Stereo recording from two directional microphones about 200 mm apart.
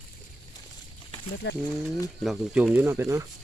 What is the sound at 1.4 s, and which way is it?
Speech, 60° left (ahead or behind).